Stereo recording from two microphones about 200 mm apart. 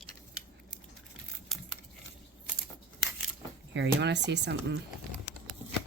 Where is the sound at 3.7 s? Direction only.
60° right (ahead or behind).